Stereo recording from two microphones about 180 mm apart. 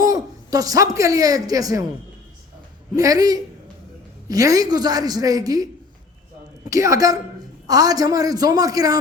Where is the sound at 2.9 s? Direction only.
20° right (ahead or behind).